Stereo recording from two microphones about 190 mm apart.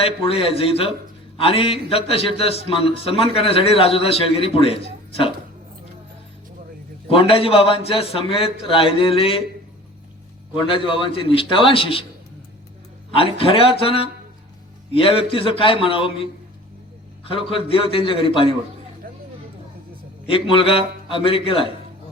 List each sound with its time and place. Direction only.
0.0 s a man's voice: 30° left (ahead or behind)
7.1 s a man's voice: 30° left (ahead or behind)
10.5 s a man's voice: 25° left (ahead or behind)
13.1 s a man's voice: 30° left (ahead or behind)
20.2 s a man's voice: 30° left (ahead or behind)